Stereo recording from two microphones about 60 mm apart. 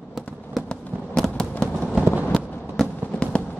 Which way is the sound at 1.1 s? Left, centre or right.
Centre.